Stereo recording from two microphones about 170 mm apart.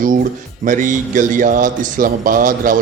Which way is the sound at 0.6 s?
50° right (ahead or behind).